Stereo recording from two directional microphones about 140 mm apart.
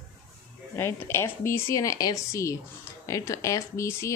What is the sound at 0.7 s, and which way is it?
A woman's voice, 20° left (ahead or behind).